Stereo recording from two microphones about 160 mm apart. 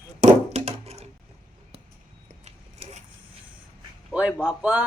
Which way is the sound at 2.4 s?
45° right (ahead or behind).